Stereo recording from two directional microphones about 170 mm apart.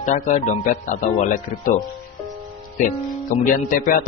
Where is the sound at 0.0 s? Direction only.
45° left (ahead or behind).